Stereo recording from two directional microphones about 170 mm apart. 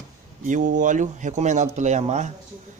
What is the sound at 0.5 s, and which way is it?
Speech, 50° right (ahead or behind).